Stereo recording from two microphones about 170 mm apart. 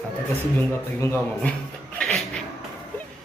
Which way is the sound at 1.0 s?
15° left (ahead or behind).